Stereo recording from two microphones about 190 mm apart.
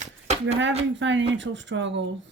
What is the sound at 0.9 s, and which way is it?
Speech, 75° right (ahead or behind).